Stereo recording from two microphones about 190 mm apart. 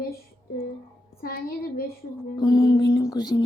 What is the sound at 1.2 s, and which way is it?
Speech, 50° left (ahead or behind).